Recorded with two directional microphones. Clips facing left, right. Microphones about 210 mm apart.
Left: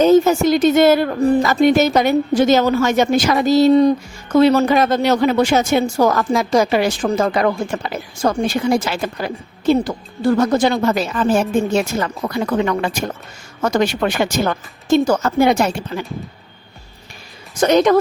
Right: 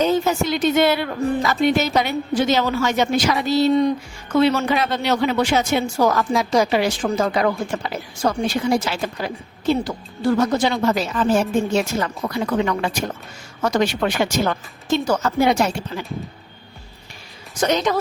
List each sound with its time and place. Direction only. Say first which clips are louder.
0.0 s speech: left 7 dB; 45° left (ahead or behind)
17.6 s speech: left 6 dB; 55° left (ahead or behind)